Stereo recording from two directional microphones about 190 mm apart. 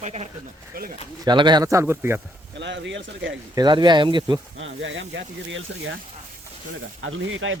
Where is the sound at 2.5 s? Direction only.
70° right (ahead or behind).